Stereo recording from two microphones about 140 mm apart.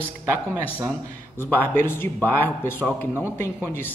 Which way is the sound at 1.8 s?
15° left (ahead or behind).